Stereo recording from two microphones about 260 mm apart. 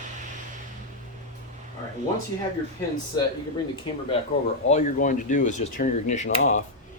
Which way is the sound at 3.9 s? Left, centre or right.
Centre.